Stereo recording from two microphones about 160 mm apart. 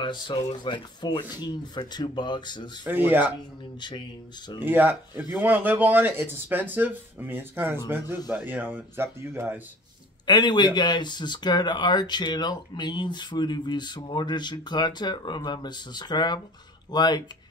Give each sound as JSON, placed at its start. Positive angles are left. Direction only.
{"t": 0.0, "sound": "speech", "side_deg": 30}
{"t": 2.9, "sound": "speech", "side_deg": -10}
{"t": 4.6, "sound": "speech", "side_deg": -10}
{"t": 10.2, "sound": "speech", "side_deg": 25}